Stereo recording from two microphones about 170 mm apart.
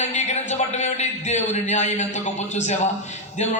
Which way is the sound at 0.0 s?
40° left (ahead or behind).